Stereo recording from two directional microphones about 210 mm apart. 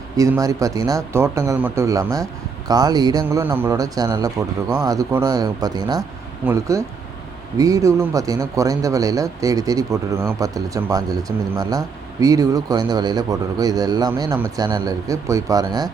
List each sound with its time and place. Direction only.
0.2 s speech: 15° right (ahead or behind)